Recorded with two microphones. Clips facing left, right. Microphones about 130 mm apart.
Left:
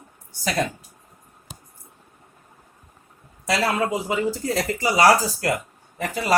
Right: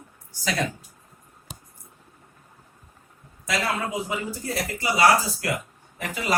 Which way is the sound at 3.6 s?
80° left.